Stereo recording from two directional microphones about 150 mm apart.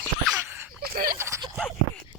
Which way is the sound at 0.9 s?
75° right (ahead or behind).